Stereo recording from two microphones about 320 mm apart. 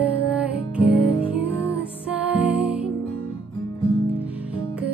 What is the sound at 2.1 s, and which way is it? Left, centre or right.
Music, centre.